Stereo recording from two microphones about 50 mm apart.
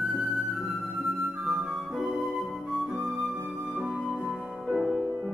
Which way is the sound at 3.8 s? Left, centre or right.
Centre.